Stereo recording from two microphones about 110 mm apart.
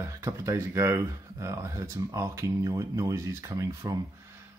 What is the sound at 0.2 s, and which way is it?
Speech, 25° right (ahead or behind).